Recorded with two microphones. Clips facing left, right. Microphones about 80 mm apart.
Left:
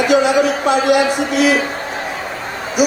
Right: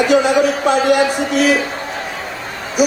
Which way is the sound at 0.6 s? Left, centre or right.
Right.